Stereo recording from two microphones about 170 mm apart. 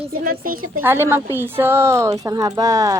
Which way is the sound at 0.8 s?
15° right (ahead or behind).